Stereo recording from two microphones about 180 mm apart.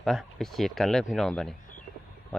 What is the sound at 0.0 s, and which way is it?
Speech, centre (ahead or behind).